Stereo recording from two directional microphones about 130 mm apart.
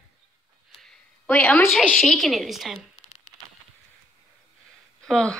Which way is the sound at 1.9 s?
5° left (ahead or behind).